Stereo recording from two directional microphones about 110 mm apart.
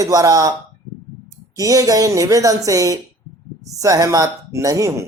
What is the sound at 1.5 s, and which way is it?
Speech, 30° right (ahead or behind).